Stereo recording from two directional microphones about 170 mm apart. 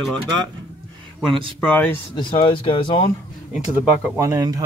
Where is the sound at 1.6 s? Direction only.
10° left (ahead or behind).